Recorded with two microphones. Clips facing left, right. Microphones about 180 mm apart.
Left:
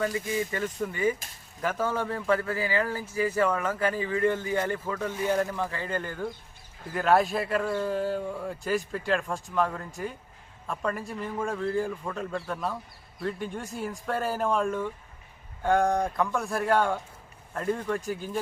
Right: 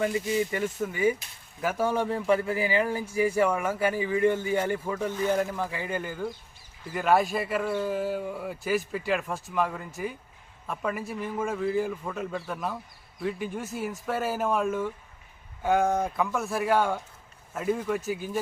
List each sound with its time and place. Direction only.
0.0 s speech: 20° right (ahead or behind)
0.6 s a man's voice: 5° right (ahead or behind)